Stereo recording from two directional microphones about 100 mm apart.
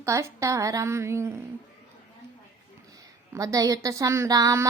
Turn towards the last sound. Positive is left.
turn(degrees=-35)  # may be behind; listen again after turning